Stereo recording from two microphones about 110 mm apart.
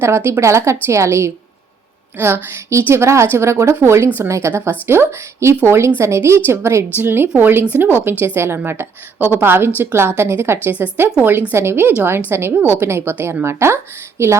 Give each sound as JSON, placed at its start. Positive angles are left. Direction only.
{"t": 0.0, "sound": "a woman's voice", "side_deg": -20}